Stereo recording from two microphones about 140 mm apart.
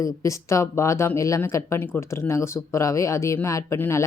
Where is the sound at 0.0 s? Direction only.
20° left (ahead or behind).